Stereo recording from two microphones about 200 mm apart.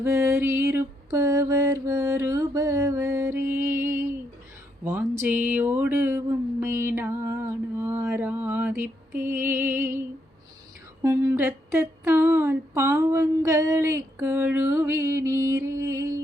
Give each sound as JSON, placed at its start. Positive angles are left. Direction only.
{"t": 0.0, "sound": "humming", "side_deg": -15}
{"t": 4.8, "sound": "speech", "side_deg": -10}
{"t": 5.2, "sound": "humming", "side_deg": -10}
{"t": 11.0, "sound": "humming", "side_deg": -10}